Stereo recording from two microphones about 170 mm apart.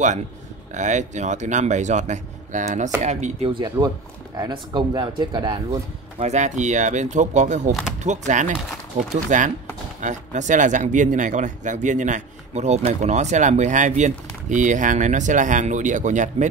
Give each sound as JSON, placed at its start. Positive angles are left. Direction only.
{"t": 0.7, "sound": "speech", "side_deg": -45}
{"t": 5.7, "sound": "speech", "side_deg": -40}